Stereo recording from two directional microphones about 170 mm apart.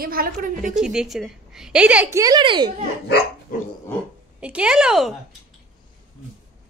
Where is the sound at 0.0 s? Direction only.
60° right (ahead or behind).